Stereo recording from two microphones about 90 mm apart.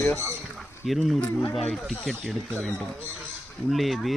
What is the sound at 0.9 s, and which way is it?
Speech, centre (ahead or behind).